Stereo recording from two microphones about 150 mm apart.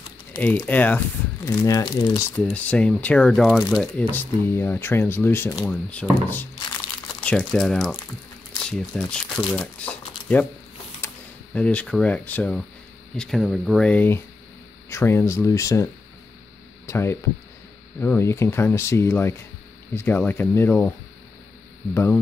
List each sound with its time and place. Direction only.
0.3 s speech: 10° left (ahead or behind)
1.6 s speech: 25° left (ahead or behind)
2.4 s speech: 10° left (ahead or behind)
5.7 s speech: 10° left (ahead or behind)
11.5 s speech: 10° left (ahead or behind)
21.9 s speech: 15° left (ahead or behind)